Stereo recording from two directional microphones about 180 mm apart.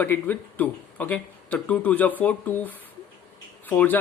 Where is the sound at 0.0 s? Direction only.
10° left (ahead or behind).